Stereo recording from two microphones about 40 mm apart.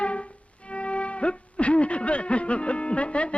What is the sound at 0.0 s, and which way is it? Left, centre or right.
Music, left.